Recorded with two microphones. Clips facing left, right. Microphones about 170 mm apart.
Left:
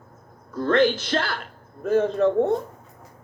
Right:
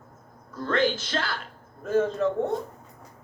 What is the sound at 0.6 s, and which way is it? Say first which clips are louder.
Speech: left 5 dB; 60° left (ahead or behind).